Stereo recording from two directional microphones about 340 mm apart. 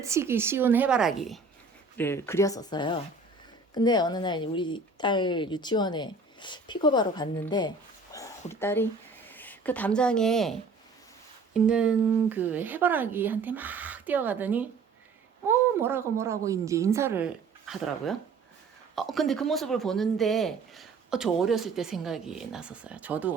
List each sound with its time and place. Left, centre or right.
0.0 s speech: centre
8.1 s a sound: centre
9.3 s speech: centre